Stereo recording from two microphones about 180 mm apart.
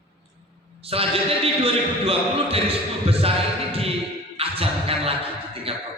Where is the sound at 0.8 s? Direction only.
30° right (ahead or behind).